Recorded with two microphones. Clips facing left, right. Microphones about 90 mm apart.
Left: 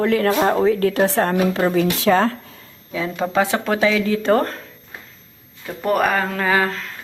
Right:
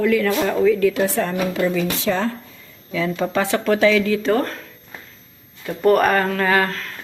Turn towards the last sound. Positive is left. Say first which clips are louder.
# even
turn(degrees=15)  # may be behind; listen again after turning